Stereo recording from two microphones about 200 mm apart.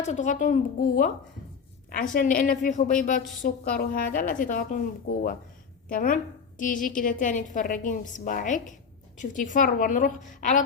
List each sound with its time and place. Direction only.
0.0 s a woman's voice: 35° left (ahead or behind)